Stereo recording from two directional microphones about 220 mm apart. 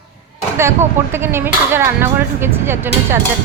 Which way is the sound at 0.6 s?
10° right (ahead or behind).